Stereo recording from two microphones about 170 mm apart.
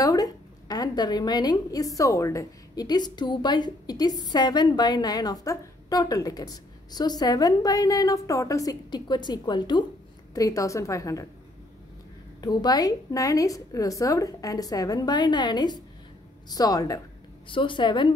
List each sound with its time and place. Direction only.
0.0 s a woman's voice: 20° left (ahead or behind)
12.4 s a woman's voice: 25° left (ahead or behind)